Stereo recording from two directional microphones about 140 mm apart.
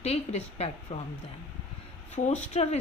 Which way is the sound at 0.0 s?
50° left (ahead or behind).